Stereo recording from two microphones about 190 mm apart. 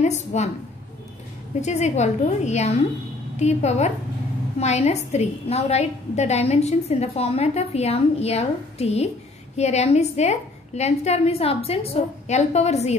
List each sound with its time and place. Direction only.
0.0 s a woman's voice: 35° left (ahead or behind)
1.6 s a woman's voice: 35° left (ahead or behind)